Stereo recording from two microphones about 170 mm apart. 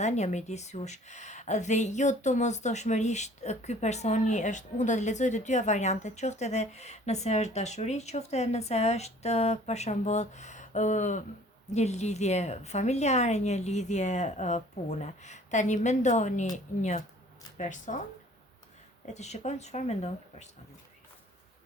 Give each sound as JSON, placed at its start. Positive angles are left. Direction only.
{"t": 0.0, "sound": "speech", "side_deg": 40}
{"t": 19.0, "sound": "speech", "side_deg": 40}